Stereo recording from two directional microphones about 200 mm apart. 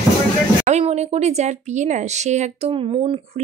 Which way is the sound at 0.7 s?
35° right (ahead or behind).